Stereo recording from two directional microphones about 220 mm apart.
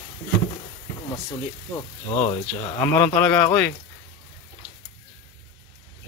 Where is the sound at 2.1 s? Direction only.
25° left (ahead or behind).